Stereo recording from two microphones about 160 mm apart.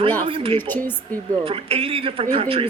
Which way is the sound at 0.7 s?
10° left (ahead or behind).